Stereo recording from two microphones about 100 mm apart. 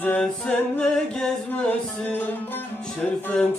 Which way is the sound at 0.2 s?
5° left (ahead or behind).